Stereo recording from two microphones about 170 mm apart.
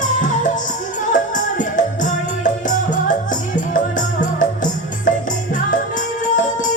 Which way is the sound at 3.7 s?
50° left (ahead or behind).